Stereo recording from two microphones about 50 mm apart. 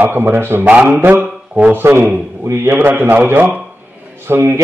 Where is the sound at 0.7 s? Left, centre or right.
Right.